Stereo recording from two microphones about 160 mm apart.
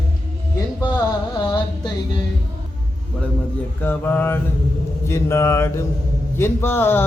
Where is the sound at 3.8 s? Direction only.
10° left (ahead or behind).